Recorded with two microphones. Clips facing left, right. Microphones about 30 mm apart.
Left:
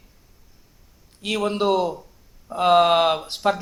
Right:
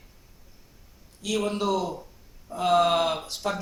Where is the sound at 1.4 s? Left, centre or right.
Left.